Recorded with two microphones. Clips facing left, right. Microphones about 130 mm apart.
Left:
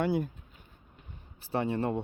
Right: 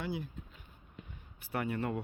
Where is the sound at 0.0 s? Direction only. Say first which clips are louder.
Left 10 dB; 60° left (ahead or behind).